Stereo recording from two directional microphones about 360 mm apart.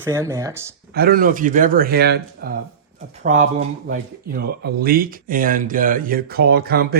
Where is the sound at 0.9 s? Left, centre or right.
Right.